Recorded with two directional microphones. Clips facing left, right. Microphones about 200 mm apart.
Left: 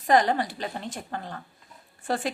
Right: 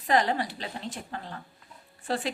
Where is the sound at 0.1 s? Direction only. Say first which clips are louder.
Left 3 dB; 50° left (ahead or behind).